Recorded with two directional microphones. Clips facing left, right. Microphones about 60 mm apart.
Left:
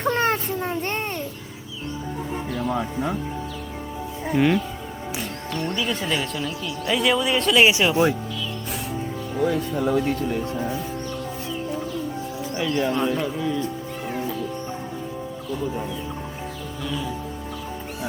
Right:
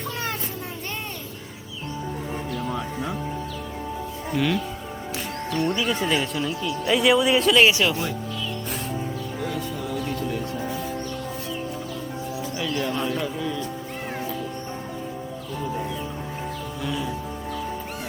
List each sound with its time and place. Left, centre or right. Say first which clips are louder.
0.0 s a sound: left 8 dB; left
2.6 s speech: left 6 dB; left
4.3 s speech: left 4 dB; left
5.5 s speech: right 2 dB; centre
7.6 s speech: left 1 dB; centre
9.4 s speech: left 9 dB; left
12.5 s speech: left 5 dB; left